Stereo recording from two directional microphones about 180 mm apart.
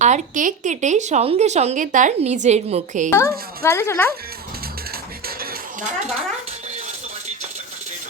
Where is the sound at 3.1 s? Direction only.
15° left (ahead or behind).